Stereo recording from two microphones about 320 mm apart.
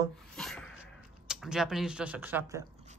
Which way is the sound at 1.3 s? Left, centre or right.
Centre.